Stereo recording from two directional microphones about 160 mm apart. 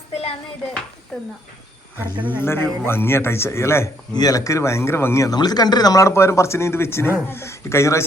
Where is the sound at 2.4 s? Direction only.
15° left (ahead or behind).